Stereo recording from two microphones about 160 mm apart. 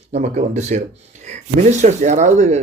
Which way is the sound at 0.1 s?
45° right (ahead or behind).